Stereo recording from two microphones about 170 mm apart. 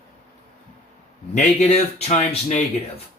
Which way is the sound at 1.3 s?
40° left (ahead or behind).